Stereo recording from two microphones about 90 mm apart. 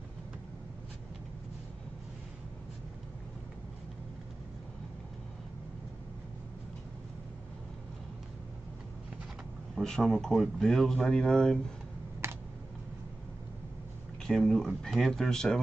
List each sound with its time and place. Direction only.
9.8 s a man's voice: 5° left (ahead or behind)
12.2 s computer keyboard: 30° right (ahead or behind)
14.2 s a man's voice: 5° left (ahead or behind)